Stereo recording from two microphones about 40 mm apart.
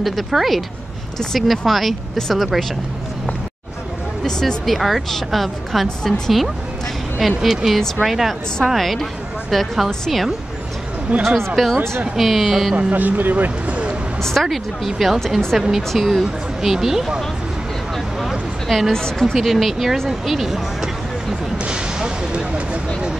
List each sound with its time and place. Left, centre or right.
0.0 s speech: centre
4.6 s a woman's voice: centre
11.5 s speech: centre
12.7 s speech: right
13.7 s a sound: right
14.3 s speech: centre
18.7 s speech: centre
18.9 s a woman's voice: centre
19.3 s speech: centre
21.6 s a sound: right